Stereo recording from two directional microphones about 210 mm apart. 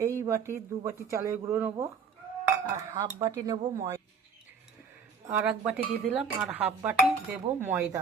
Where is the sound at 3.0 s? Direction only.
25° right (ahead or behind).